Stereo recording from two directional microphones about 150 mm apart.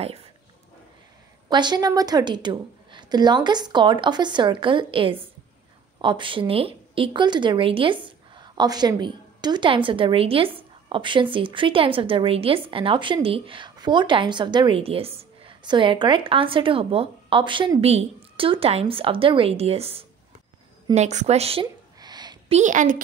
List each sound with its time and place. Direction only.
1.5 s a woman's voice: 30° right (ahead or behind)
22.0 s a sound: 30° right (ahead or behind)
22.5 s a woman's voice: 55° right (ahead or behind)